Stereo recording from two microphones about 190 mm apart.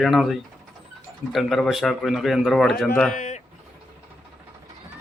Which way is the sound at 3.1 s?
40° left (ahead or behind).